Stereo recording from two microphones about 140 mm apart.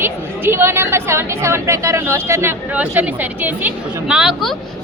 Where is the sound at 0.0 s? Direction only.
15° right (ahead or behind).